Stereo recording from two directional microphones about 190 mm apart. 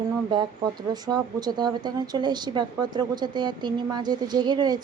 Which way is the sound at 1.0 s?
20° right (ahead or behind).